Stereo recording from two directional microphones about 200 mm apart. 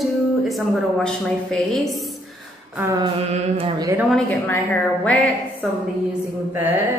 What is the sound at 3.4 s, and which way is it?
Speech, 25° right (ahead or behind).